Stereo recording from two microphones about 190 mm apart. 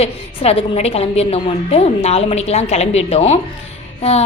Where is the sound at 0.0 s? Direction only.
30° left (ahead or behind).